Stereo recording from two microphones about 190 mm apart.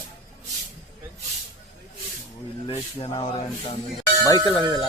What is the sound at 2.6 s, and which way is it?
Speech, 30° left (ahead or behind).